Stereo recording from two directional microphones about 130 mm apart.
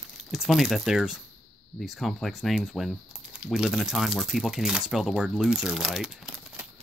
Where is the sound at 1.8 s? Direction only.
Centre (ahead or behind).